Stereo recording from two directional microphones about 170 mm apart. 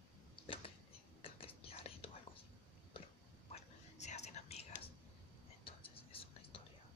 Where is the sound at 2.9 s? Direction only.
30° left (ahead or behind).